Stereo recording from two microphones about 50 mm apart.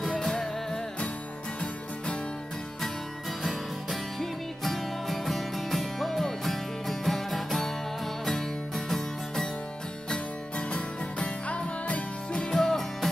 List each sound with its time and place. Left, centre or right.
0.0 s music: centre
3.4 s music: centre
10.7 s music: left; by 13.1 s centre